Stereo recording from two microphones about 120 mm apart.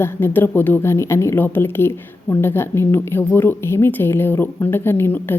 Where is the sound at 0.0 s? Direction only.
20° left (ahead or behind).